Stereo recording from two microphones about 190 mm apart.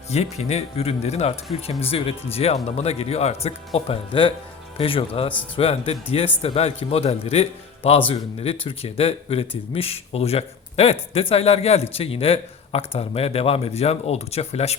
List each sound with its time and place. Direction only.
0.1 s a man's voice: 35° left (ahead or behind)